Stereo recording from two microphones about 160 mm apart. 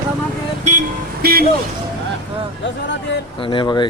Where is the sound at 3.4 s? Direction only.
30° left (ahead or behind).